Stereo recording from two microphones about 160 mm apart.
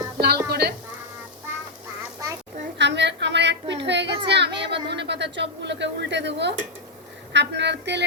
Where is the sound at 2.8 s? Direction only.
90° right.